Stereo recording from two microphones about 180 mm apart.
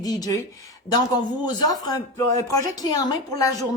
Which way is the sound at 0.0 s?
20° left (ahead or behind).